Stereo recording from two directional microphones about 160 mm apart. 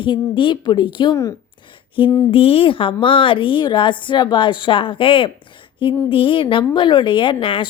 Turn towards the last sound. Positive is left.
turn(degrees=30)  # may be behind; listen again after turning